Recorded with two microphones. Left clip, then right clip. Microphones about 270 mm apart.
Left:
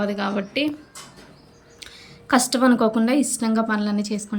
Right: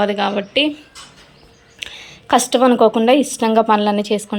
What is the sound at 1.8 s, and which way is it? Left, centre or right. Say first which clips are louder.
A woman's voice: right 7 dB; centre.